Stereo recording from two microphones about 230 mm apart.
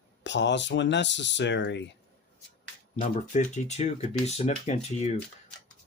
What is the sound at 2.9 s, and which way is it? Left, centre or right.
Speech, left.